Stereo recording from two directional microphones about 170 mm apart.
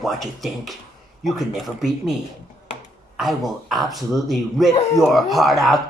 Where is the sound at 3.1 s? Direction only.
Centre (ahead or behind).